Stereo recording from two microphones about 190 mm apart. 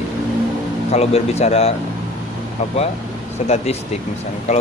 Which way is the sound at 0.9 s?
35° left (ahead or behind).